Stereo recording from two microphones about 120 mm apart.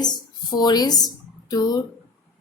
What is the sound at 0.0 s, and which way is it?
Speech, 35° left (ahead or behind).